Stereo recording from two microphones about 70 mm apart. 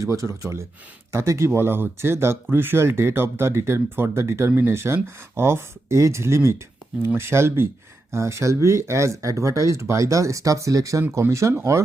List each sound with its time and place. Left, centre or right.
0.0 s speech: right
1.5 s speech: right